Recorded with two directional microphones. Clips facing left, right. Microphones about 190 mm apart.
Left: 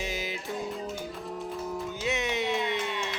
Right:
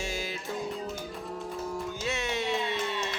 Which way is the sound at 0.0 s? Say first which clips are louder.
Left 1 dB; 20° left (ahead or behind).